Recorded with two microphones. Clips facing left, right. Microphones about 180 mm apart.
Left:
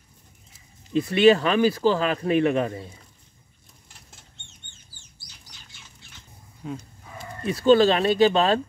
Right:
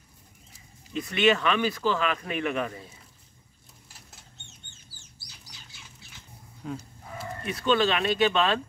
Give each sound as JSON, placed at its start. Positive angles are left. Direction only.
{"t": 0.9, "sound": "speech", "side_deg": 35}
{"t": 6.6, "sound": "livestock", "side_deg": 5}
{"t": 7.4, "sound": "speech", "side_deg": 35}